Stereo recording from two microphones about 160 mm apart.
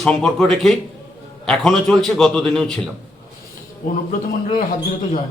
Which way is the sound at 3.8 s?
60° left (ahead or behind).